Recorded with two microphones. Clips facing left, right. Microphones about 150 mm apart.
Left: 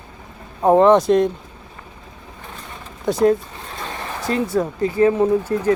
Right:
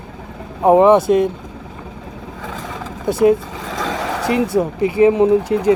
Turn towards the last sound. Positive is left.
turn(degrees=-15)  # may be behind; listen again after turning